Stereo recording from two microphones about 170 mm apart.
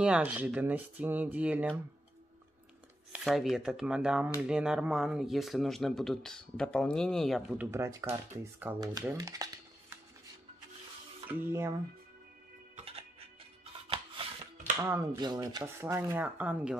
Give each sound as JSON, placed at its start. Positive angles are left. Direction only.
{"t": 0.0, "sound": "speech", "side_deg": -10}
{"t": 3.1, "sound": "speech", "side_deg": 0}
{"t": 7.6, "sound": "speech", "side_deg": -15}
{"t": 8.7, "sound": "speech", "side_deg": -25}
{"t": 9.1, "sound": "music", "side_deg": -20}
{"t": 11.2, "sound": "speech", "side_deg": -15}
{"t": 12.7, "sound": "music", "side_deg": -35}
{"t": 14.8, "sound": "speech", "side_deg": -20}